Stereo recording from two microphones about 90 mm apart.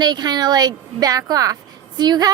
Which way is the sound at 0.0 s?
50° right (ahead or behind).